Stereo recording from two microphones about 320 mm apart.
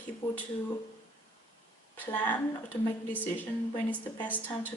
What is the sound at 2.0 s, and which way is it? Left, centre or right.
Speech, centre.